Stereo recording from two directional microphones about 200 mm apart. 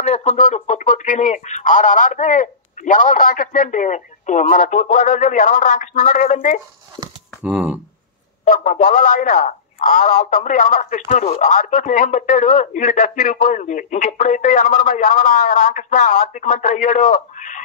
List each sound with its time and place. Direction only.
0.0 s speech: 35° left (ahead or behind)
7.5 s speech: 10° right (ahead or behind)
8.5 s speech: 40° left (ahead or behind)